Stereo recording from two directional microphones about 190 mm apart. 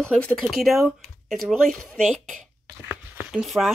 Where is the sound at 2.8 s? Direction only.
5° right (ahead or behind).